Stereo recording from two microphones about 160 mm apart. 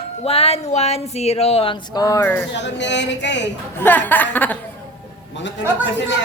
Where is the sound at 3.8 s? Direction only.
10° left (ahead or behind).